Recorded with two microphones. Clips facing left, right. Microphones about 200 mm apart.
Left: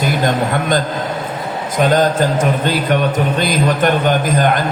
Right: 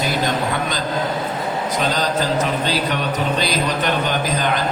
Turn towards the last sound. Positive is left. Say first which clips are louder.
# left 6 dB
turn(degrees=50)  # may be behind; listen again after turning